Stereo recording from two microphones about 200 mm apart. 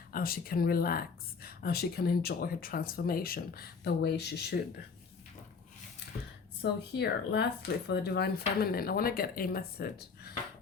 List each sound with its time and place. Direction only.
0.1 s speech: 50° left (ahead or behind)
6.6 s speech: 55° left (ahead or behind)